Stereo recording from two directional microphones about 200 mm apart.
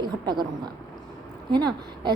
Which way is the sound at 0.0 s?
20° right (ahead or behind).